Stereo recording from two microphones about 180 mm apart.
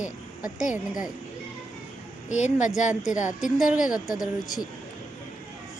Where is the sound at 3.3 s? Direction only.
5° right (ahead or behind).